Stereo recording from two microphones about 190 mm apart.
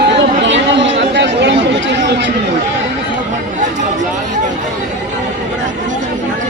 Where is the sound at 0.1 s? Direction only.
70° right (ahead or behind).